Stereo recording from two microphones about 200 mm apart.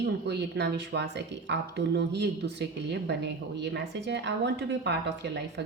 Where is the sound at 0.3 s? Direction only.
55° right (ahead or behind).